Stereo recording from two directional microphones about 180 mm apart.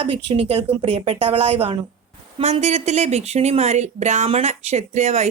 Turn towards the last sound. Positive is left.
turn(degrees=-40)  # may be behind; listen again after turning